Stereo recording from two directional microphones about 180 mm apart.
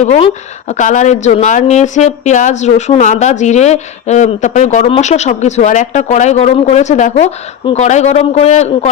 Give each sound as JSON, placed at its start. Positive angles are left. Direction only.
{"t": 0.0, "sound": "a woman's voice", "side_deg": 40}